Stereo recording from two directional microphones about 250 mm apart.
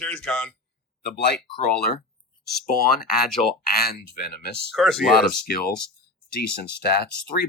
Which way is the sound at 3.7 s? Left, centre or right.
Left.